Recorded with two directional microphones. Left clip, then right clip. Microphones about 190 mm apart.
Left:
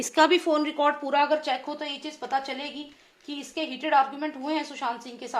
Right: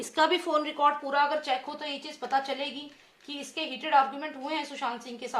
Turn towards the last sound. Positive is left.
turn(degrees=35)  # may be behind; listen again after turning